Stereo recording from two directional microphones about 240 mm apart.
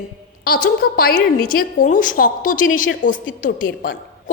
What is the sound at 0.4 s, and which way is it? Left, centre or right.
A woman's voice, left.